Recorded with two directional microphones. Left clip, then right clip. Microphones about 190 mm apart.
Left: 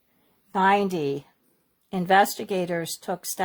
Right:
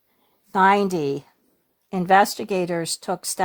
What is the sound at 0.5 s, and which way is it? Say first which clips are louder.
Speech: right 4 dB; 40° right (ahead or behind).